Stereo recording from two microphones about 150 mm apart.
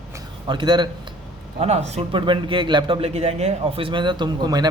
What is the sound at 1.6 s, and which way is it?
A man's voice, 45° right (ahead or behind).